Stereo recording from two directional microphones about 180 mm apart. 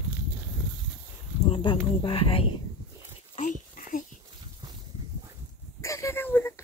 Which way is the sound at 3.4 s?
45° left (ahead or behind).